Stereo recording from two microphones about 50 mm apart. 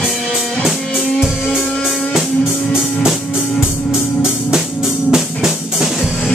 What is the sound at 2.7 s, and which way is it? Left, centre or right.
Music, centre.